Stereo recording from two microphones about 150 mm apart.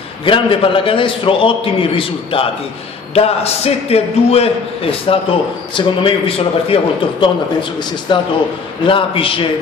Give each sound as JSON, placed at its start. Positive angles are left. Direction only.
{"t": 0.2, "sound": "a man's voice", "side_deg": 35}